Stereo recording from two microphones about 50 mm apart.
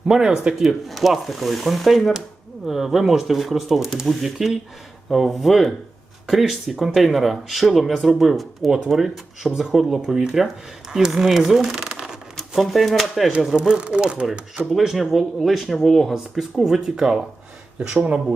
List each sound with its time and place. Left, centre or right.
0.1 s speech: centre
0.6 s speech: centre
12.5 s speech: centre
13.6 s speech: right
14.7 s speech: centre